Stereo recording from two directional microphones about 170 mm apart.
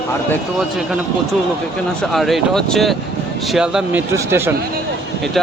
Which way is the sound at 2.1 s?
Centre (ahead or behind).